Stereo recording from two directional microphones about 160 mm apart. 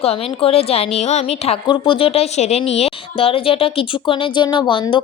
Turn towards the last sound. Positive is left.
turn(degrees=30)  # may be behind; listen again after turning